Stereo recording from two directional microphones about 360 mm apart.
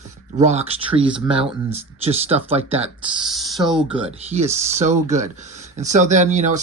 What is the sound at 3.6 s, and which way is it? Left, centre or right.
Speech, centre.